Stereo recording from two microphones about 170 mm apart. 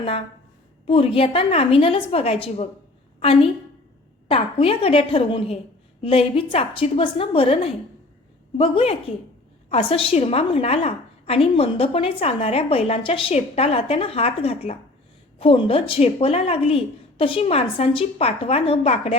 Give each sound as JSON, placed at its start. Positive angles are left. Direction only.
{"t": 0.9, "sound": "a woman's voice", "side_deg": 35}